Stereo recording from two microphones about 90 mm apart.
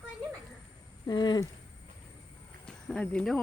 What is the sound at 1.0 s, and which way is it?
Speech, 60° left (ahead or behind).